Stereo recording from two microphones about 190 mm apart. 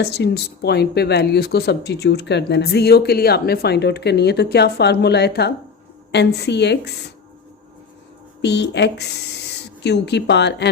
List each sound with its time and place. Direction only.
0.0 s speech: 60° left (ahead or behind)
8.4 s speech: 60° left (ahead or behind)